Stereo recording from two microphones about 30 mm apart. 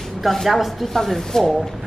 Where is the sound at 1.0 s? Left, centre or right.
Centre.